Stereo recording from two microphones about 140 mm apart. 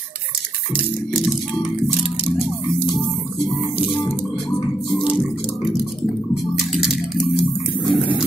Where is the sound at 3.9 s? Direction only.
35° left (ahead or behind).